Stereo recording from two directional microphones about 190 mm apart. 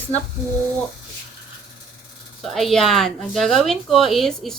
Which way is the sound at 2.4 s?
Centre (ahead or behind).